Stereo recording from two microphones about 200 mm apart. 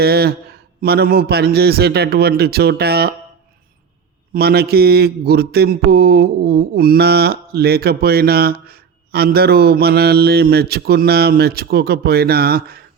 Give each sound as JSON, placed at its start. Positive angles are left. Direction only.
{"t": 0.0, "sound": "speech", "side_deg": -50}
{"t": 4.4, "sound": "speech", "side_deg": -50}